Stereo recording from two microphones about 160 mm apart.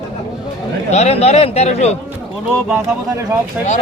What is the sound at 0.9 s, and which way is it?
A man's voice, 45° left (ahead or behind).